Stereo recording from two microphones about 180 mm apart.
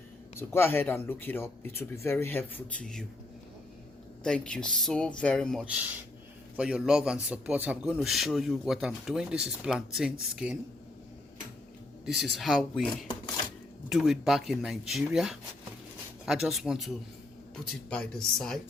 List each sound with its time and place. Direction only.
0.3 s speech: 15° left (ahead or behind)
4.2 s speech: 5° left (ahead or behind)
12.2 s speech: centre (ahead or behind)